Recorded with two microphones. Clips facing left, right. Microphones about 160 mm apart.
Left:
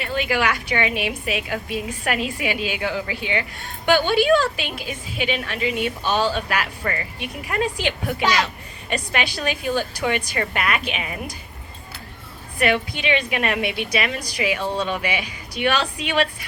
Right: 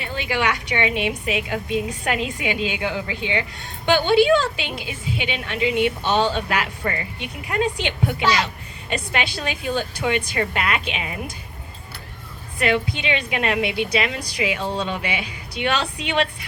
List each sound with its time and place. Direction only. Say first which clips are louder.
0.0 s a woman's voice: left 2 dB; 15° right (ahead or behind)
12.5 s a woman's voice: even; 25° right (ahead or behind)